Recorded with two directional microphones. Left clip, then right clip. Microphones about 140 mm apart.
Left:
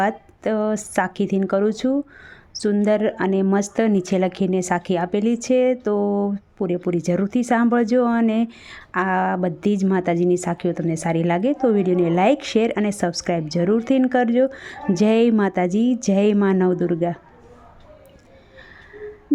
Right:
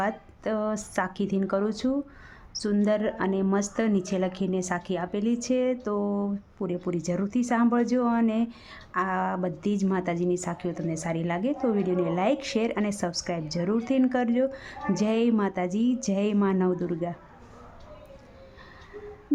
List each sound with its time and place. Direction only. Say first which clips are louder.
0.0 s a woman's voice: left 7 dB; 30° left (ahead or behind)